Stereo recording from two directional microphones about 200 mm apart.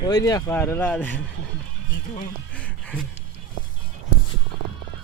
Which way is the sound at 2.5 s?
5° left (ahead or behind).